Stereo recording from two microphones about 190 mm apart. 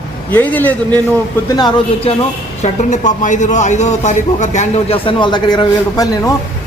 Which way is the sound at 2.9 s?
40° left (ahead or behind).